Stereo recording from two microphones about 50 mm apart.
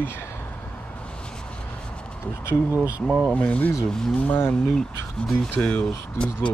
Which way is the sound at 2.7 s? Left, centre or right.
Right.